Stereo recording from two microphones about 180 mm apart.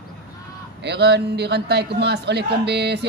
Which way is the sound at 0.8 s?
65° right (ahead or behind).